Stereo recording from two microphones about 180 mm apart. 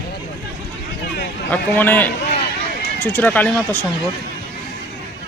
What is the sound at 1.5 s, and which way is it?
Speech, 10° left (ahead or behind).